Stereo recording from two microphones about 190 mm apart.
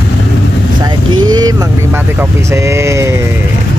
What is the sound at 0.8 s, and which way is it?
Vehicle, 20° right (ahead or behind).